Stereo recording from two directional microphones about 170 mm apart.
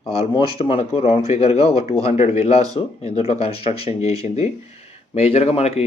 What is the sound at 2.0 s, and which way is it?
Speech, 40° left (ahead or behind).